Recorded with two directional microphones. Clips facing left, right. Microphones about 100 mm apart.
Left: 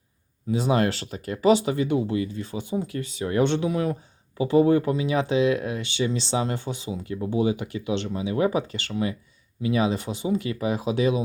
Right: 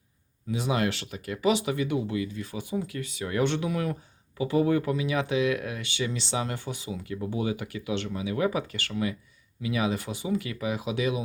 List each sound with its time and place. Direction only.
0.5 s speech: 35° left (ahead or behind)